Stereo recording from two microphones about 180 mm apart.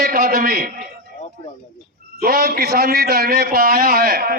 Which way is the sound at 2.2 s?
55° right (ahead or behind).